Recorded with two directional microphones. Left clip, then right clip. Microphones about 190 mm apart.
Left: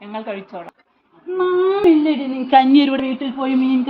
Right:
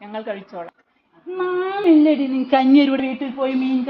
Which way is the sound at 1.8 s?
10° right (ahead or behind).